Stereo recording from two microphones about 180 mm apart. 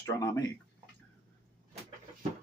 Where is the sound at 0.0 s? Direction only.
15° left (ahead or behind).